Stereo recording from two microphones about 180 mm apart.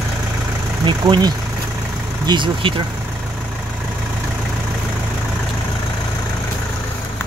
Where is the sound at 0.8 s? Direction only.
25° right (ahead or behind).